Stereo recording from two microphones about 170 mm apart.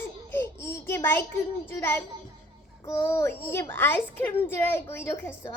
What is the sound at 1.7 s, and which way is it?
A child's voice, 15° left (ahead or behind).